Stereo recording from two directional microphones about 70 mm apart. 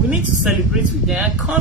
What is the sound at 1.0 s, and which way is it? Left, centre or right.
Speech, centre.